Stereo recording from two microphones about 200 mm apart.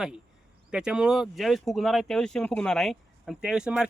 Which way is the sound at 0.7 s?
5° right (ahead or behind).